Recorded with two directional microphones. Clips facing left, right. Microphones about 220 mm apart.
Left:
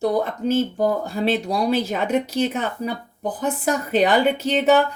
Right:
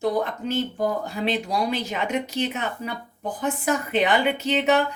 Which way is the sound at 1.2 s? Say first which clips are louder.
Left 4 dB; 40° left (ahead or behind).